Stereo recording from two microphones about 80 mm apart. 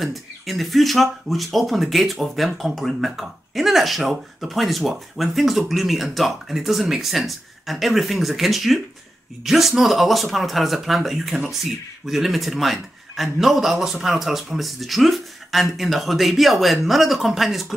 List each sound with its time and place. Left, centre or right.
0.0 s speech: centre